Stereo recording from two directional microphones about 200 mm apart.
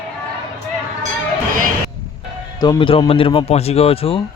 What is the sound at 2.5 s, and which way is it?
Speech, 20° left (ahead or behind).